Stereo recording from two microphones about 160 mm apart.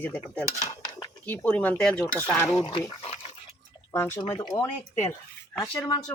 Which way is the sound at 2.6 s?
30° left (ahead or behind).